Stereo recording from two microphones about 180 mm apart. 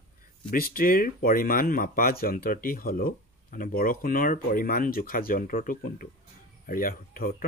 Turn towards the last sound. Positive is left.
turn(degrees=55)  # may be behind; listen again after turning